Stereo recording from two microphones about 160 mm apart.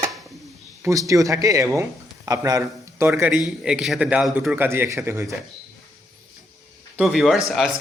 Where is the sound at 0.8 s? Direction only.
20° right (ahead or behind).